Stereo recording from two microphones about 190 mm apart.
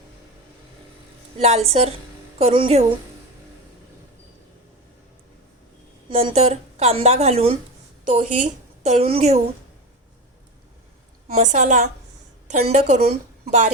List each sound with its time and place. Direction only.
1.4 s a woman's voice: 35° right (ahead or behind)
6.1 s a woman's voice: 30° right (ahead or behind)
11.3 s a woman's voice: 35° right (ahead or behind)